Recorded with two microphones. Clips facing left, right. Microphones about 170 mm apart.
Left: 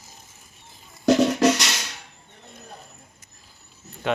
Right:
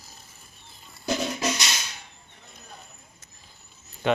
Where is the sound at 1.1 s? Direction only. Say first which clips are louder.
Left 10 dB; 70° left (ahead or behind).